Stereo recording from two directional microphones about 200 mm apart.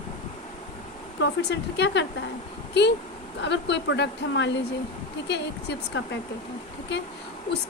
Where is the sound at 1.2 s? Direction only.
60° left (ahead or behind).